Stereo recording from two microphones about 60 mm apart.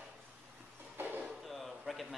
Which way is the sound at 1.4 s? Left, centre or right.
Centre.